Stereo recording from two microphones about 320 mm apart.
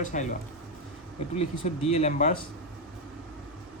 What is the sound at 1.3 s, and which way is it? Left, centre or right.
Speech, centre.